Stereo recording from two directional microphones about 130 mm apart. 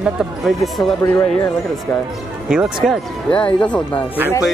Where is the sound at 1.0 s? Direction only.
30° left (ahead or behind).